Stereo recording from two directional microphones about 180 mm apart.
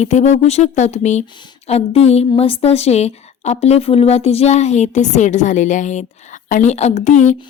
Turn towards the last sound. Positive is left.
turn(degrees=40)  # may be behind; listen again after turning